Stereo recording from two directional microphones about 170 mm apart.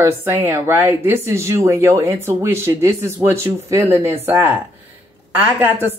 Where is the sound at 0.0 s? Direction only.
15° right (ahead or behind).